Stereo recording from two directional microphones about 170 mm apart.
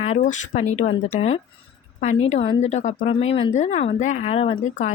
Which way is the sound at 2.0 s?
45° left (ahead or behind).